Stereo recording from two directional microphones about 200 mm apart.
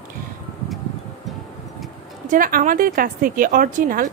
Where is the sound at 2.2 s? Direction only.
45° right (ahead or behind).